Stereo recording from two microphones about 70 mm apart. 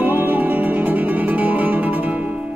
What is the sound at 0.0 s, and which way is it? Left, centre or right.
Music, right.